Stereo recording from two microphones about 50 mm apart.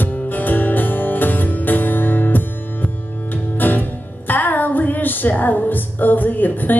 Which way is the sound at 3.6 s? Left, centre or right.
Left.